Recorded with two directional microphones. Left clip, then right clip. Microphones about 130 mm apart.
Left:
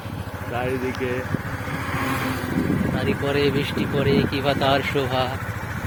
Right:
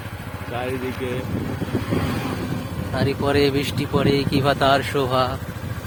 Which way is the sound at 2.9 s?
75° right (ahead or behind).